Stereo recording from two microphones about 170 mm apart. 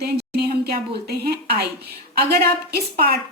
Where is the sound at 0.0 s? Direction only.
70° right (ahead or behind).